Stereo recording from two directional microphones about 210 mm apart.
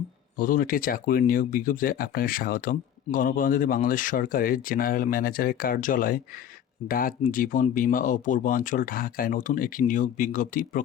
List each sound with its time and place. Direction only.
0.3 s speech: 40° left (ahead or behind)